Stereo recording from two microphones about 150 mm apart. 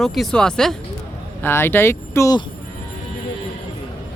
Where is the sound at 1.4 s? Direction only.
15° left (ahead or behind).